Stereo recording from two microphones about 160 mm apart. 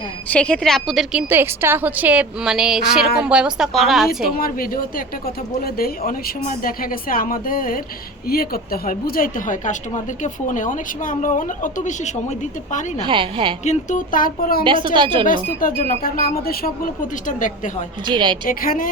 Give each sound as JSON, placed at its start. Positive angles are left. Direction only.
{"t": 0.3, "sound": "a woman's voice", "side_deg": 5}
{"t": 1.3, "sound": "a woman's voice", "side_deg": -15}
{"t": 4.4, "sound": "a woman's voice", "side_deg": 65}
{"t": 13.1, "sound": "a woman's voice", "side_deg": -30}
{"t": 13.7, "sound": "speech", "side_deg": 50}
{"t": 14.6, "sound": "a woman's voice", "side_deg": -30}
{"t": 15.4, "sound": "speech", "side_deg": 60}
{"t": 18.0, "sound": "a woman's voice", "side_deg": -30}
{"t": 18.4, "sound": "speech", "side_deg": 60}